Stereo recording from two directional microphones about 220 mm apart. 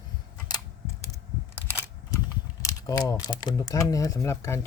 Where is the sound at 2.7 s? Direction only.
15° left (ahead or behind).